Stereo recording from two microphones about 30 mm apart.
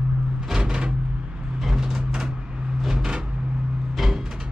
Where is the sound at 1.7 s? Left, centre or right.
Centre.